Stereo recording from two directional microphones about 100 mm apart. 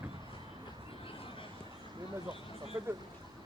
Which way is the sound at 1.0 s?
65° left (ahead or behind).